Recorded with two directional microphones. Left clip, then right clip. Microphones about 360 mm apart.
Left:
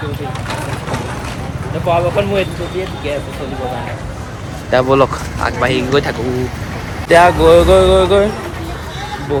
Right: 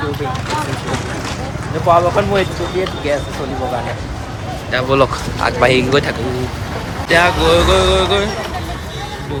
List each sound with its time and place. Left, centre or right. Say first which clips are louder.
1.9 s speech: right 2 dB; centre
4.7 s speech: left 3 dB; centre